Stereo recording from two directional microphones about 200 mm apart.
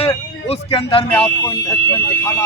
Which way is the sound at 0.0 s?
30° left (ahead or behind).